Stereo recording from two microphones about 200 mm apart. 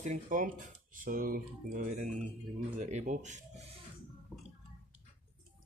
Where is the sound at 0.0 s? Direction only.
40° right (ahead or behind).